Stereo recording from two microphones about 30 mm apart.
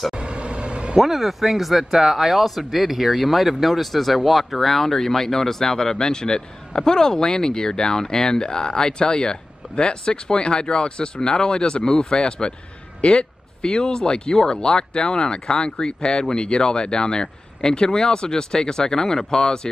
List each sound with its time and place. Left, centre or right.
0.1 s vehicle: right
0.9 s speech: centre; by 12.5 s left
13.0 s a sound: left
13.7 s speech: left
14.3 s speech: centre
14.6 s speech: left